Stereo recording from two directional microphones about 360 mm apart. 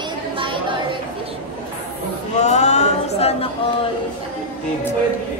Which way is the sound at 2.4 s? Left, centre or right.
Centre.